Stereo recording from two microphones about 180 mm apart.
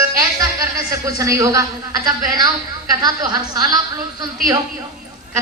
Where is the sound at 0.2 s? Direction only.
20° right (ahead or behind).